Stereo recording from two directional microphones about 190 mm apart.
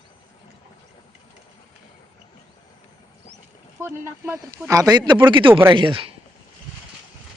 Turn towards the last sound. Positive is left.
turn(degrees=-30)  # may be behind; listen again after turning